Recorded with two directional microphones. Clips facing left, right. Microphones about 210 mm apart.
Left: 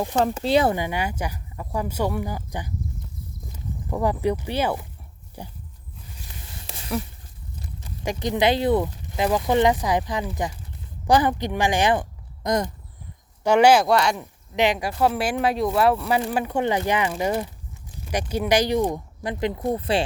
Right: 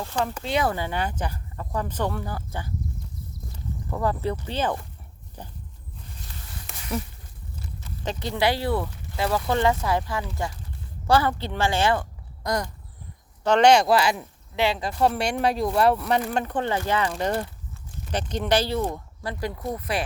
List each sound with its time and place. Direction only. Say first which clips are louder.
0.0 s speech: left 6 dB; 20° left (ahead or behind)
0.7 s speech: left 2 dB; 15° left (ahead or behind)
3.8 s speech: left 3 dB; 15° left (ahead or behind)
7.9 s speech: left 4 dB; 15° left (ahead or behind)
13.4 s speech: left 1 dB; 10° left (ahead or behind)
14.5 s speech: left 3 dB; 15° left (ahead or behind)